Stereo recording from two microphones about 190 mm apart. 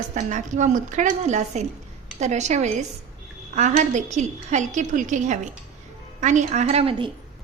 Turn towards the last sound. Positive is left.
turn(degrees=-30)  # may be behind; listen again after turning